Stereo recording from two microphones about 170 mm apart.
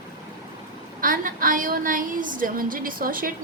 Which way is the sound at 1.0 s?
55° right (ahead or behind).